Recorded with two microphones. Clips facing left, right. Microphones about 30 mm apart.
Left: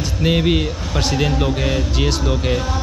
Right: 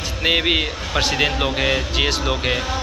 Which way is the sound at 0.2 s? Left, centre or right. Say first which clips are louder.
Even; right.